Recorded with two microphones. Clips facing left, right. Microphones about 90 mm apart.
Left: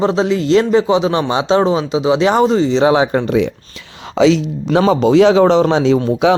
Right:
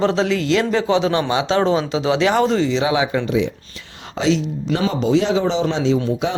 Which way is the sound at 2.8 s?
40° left (ahead or behind).